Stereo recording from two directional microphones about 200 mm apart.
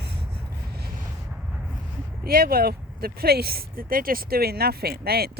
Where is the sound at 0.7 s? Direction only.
50° right (ahead or behind).